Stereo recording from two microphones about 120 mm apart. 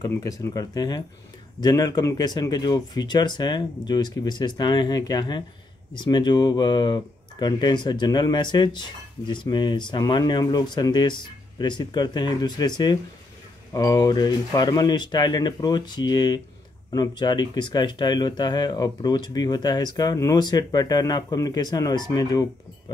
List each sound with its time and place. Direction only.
0.1 s speech: 25° left (ahead or behind)